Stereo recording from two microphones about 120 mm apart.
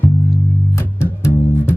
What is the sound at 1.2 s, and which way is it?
Bass guitar, 20° left (ahead or behind).